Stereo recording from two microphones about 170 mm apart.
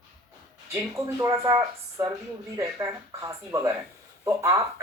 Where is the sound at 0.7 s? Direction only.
15° right (ahead or behind).